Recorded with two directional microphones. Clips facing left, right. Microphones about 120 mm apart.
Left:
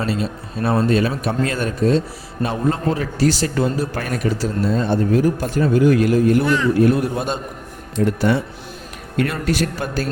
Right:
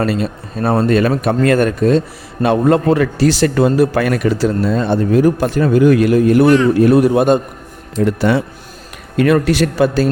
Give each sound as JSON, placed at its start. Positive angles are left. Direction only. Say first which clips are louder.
{"t": 0.0, "sound": "a man's voice", "louder": "right 5 dB", "side_deg": -60}
{"t": 0.9, "sound": "a man's voice", "louder": "right 5 dB", "side_deg": -60}
{"t": 8.0, "sound": "speech", "louder": "right 4 dB", "side_deg": -90}